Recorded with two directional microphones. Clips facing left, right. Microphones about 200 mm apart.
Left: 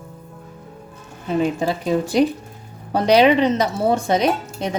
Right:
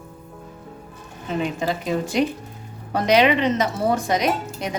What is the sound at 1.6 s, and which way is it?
A woman's voice, 35° left (ahead or behind).